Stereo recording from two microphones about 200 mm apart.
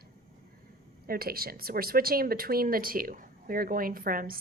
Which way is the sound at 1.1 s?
50° right (ahead or behind).